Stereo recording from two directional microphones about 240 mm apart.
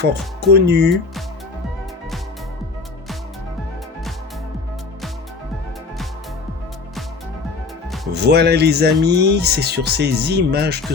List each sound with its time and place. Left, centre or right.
0.5 s speech: right
8.1 s speech: right